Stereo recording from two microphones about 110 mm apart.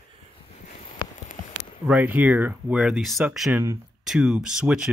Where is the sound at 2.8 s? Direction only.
Centre (ahead or behind).